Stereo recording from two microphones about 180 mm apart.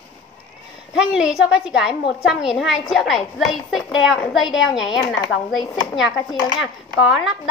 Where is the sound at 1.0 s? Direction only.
5° right (ahead or behind).